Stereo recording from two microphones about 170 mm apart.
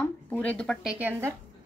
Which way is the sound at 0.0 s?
10° left (ahead or behind).